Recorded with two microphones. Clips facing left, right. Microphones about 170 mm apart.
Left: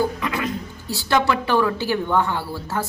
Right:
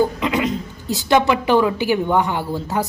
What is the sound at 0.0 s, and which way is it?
A woman's voice, 20° right (ahead or behind).